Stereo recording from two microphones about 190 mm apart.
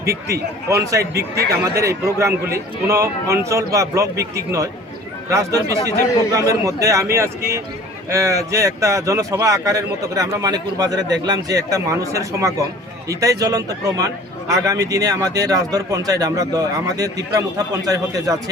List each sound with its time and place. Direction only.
0.7 s speech: 15° right (ahead or behind)
1.1 s speech: 55° right (ahead or behind)
1.6 s a man's voice: 15° right (ahead or behind)